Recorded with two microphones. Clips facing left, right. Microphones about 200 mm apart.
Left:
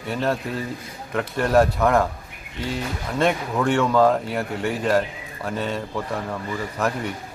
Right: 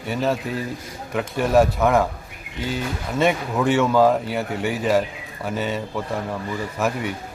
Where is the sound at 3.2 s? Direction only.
5° right (ahead or behind).